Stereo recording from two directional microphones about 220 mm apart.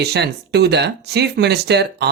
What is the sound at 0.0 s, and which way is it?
Speech, 50° right (ahead or behind).